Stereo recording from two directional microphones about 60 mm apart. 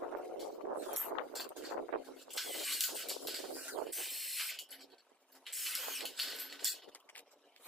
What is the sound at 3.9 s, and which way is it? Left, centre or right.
Spray, centre.